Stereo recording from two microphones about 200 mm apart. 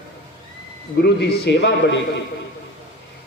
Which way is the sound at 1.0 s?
55° left (ahead or behind).